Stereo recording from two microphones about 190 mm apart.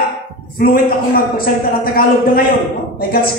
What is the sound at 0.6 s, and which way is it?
Speech, 50° left (ahead or behind).